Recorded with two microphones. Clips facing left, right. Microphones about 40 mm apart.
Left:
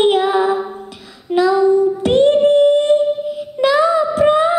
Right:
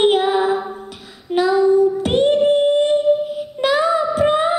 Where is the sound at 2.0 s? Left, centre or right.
Centre.